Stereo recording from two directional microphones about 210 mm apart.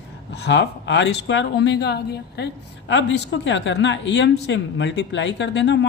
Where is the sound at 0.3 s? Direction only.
55° left (ahead or behind).